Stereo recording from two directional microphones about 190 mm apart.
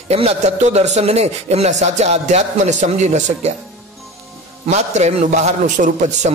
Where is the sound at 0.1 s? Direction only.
35° right (ahead or behind).